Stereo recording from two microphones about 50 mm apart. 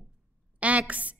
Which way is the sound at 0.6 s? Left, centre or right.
Right.